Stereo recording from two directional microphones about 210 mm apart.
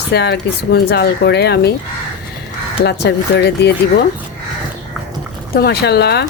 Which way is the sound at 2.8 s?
50° left (ahead or behind).